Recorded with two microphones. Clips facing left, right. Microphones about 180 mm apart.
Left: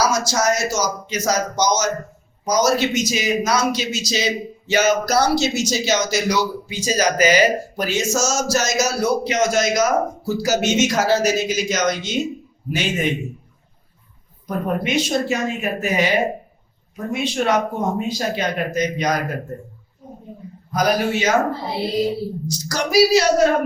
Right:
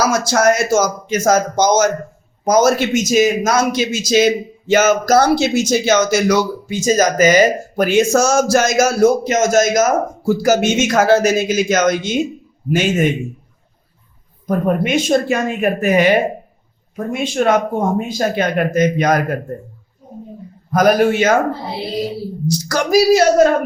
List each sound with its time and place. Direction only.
0.0 s a man's voice: 55° right (ahead or behind)
14.4 s a man's voice: 50° right (ahead or behind)
20.7 s a man's voice: 50° right (ahead or behind)
22.7 s a man's voice: 50° right (ahead or behind)